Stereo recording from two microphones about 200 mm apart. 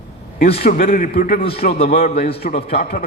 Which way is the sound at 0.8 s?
45° left (ahead or behind).